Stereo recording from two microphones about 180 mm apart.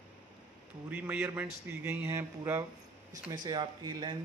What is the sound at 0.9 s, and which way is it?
A man's voice, 10° right (ahead or behind).